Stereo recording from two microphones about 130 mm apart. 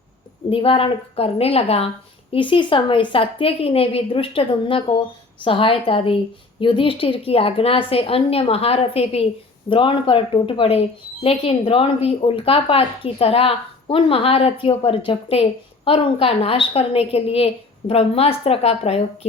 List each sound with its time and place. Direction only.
0.5 s a woman's voice: 40° left (ahead or behind)
2.3 s a woman's voice: 40° left (ahead or behind)